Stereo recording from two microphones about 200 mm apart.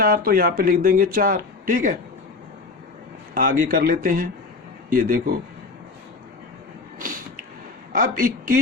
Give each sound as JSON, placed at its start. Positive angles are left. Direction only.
{"t": 0.0, "sound": "speech", "side_deg": -45}
{"t": 3.3, "sound": "speech", "side_deg": -45}
{"t": 7.9, "sound": "speech", "side_deg": -45}